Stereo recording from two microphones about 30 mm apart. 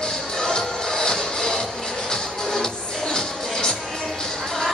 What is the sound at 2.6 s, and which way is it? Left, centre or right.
Music, centre.